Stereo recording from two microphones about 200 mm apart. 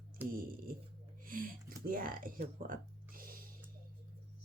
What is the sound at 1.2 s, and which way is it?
Music, 45° right (ahead or behind).